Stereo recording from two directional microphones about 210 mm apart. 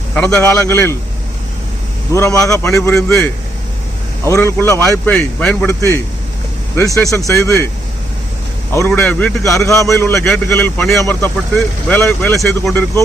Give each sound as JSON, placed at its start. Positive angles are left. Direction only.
{"t": 0.1, "sound": "speech", "side_deg": 5}
{"t": 2.1, "sound": "speech", "side_deg": 15}
{"t": 4.3, "sound": "speech", "side_deg": 10}
{"t": 7.0, "sound": "speech", "side_deg": 0}
{"t": 7.3, "sound": "speech", "side_deg": 15}
{"t": 8.9, "sound": "speech", "side_deg": 5}
{"t": 9.8, "sound": "speech", "side_deg": 15}